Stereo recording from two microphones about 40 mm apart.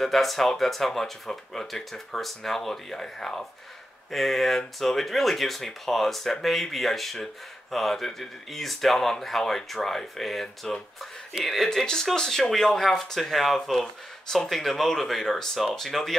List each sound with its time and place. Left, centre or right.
0.0 s speech: centre
11.8 s speech: centre